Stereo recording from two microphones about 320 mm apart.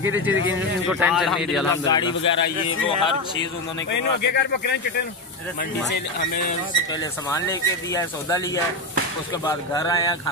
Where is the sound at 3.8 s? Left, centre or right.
Left.